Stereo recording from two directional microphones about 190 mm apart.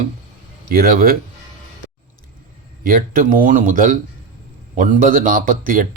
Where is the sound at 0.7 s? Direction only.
50° right (ahead or behind).